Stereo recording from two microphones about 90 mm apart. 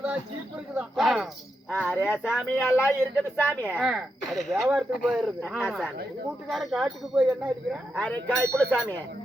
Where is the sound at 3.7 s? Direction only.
10° right (ahead or behind).